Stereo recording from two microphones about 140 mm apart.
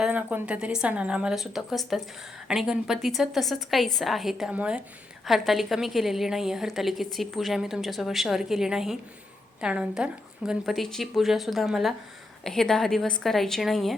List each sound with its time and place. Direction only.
0.0 s a woman's voice: 10° right (ahead or behind)